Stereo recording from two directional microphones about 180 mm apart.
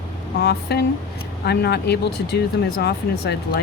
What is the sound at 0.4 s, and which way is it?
Speech, 65° left (ahead or behind).